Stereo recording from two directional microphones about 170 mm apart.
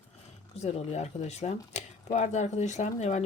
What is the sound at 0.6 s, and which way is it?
Speech, 40° left (ahead or behind).